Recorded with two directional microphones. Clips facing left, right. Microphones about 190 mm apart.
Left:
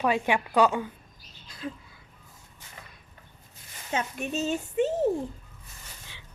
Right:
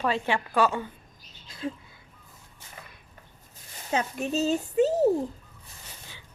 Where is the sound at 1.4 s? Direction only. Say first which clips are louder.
Right 3 dB; 25° right (ahead or behind).